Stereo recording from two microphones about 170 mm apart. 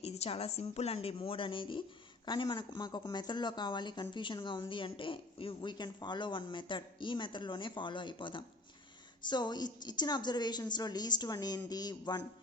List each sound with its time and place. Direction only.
0.0 s a woman's voice: 35° left (ahead or behind)